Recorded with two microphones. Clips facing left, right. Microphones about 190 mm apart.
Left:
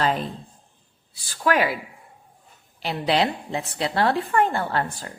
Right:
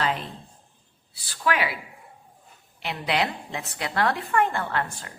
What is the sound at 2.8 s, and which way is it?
A woman's voice, 35° left (ahead or behind).